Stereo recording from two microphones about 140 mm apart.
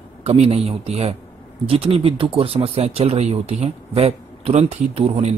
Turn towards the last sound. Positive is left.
turn(degrees=-50)  # may be behind; listen again after turning